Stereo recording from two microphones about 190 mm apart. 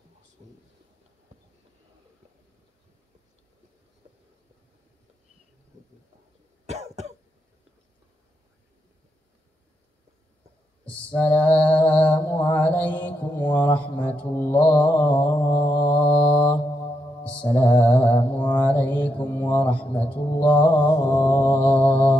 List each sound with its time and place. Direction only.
0.4 s a sound: 30° right (ahead or behind)
6.6 s cough: 35° right (ahead or behind)
11.1 s mantra: 10° left (ahead or behind)